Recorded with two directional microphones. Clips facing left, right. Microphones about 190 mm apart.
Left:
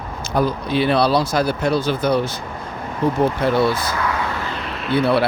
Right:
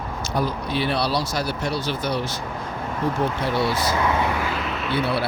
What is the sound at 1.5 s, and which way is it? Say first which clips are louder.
Speech: left 6 dB; 55° left (ahead or behind).